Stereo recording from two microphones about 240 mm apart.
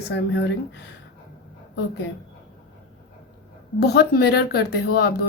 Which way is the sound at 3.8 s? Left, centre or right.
Left.